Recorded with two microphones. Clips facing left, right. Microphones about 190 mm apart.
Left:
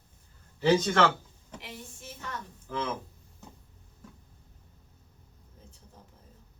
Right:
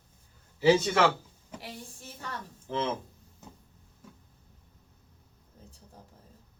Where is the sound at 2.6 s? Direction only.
25° right (ahead or behind).